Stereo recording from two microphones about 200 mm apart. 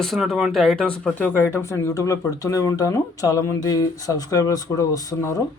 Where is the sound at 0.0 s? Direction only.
Centre (ahead or behind); by 5.4 s 15° left (ahead or behind).